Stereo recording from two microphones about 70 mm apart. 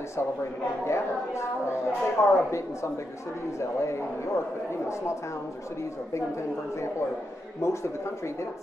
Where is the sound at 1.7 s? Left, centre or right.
Left.